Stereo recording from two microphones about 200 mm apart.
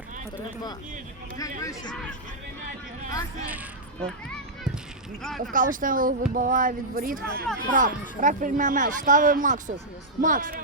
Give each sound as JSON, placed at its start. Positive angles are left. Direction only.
{"t": 1.4, "sound": "speech", "side_deg": 15}
{"t": 5.5, "sound": "speech", "side_deg": -40}